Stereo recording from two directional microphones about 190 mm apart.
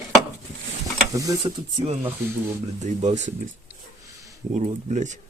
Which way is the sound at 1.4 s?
30° right (ahead or behind).